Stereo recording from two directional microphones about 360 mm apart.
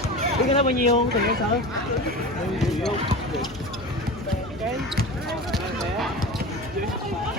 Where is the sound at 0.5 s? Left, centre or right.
Centre.